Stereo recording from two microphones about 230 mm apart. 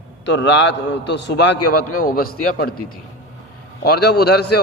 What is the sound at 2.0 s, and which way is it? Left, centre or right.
Speech, left.